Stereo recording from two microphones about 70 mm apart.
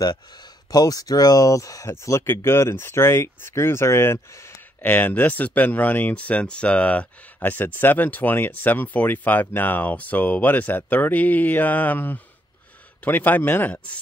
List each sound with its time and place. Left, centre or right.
0.0 s speech: left
4.8 s speech: left